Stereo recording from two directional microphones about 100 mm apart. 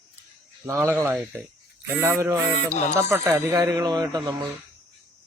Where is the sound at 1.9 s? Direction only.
25° right (ahead or behind); by 4.0 s 40° right (ahead or behind).